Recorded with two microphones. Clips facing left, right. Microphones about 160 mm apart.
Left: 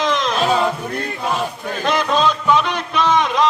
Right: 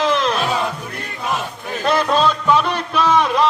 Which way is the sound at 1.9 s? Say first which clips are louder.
Right 1 dB; 5° right (ahead or behind).